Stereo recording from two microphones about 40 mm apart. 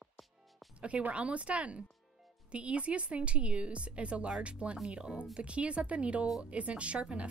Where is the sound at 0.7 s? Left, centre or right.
Right.